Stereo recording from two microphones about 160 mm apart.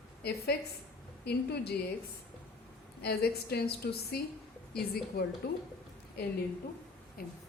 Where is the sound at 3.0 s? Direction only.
80° left.